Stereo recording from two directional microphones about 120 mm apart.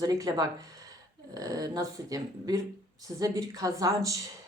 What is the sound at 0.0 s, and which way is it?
Speech, 30° right (ahead or behind).